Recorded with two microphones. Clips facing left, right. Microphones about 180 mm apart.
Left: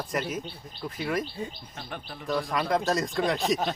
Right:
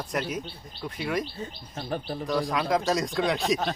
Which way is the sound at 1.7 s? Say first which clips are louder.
Right 8 dB; 35° right (ahead or behind).